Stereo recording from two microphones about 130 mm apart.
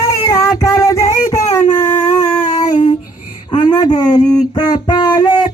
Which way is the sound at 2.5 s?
65° left (ahead or behind).